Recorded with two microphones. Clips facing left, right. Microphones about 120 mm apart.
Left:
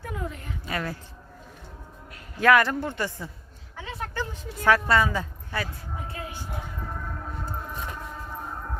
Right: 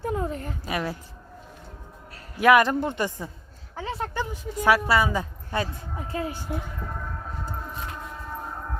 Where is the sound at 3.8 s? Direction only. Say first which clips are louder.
Right 5 dB; 35° right (ahead or behind).